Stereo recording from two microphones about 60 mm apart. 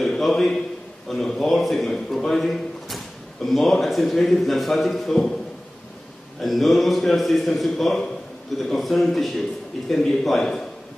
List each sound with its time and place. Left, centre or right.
0.0 s a man's voice: centre
6.4 s a man's voice: centre